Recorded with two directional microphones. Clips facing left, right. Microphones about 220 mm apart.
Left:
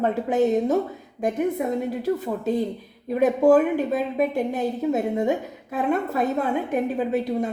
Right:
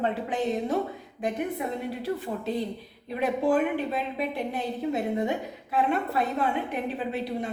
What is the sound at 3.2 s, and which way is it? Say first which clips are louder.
A woman's voice: left 7 dB; 45° left (ahead or behind).